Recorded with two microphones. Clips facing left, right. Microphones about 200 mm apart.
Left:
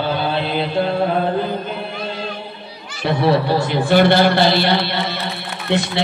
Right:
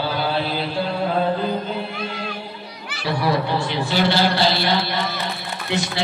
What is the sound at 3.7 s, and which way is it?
A man's voice, 55° left (ahead or behind).